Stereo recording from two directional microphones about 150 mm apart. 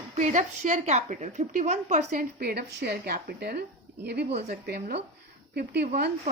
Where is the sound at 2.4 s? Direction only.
90° right.